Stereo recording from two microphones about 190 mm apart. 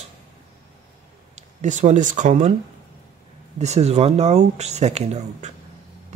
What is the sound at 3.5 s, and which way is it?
Speech, 35° right (ahead or behind).